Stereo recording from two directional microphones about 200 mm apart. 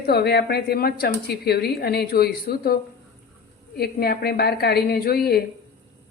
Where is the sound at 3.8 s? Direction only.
50° left (ahead or behind).